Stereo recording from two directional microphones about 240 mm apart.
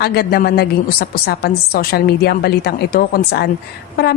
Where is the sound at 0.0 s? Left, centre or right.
Left.